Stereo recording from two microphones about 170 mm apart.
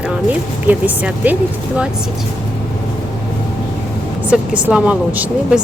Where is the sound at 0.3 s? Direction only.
10° right (ahead or behind).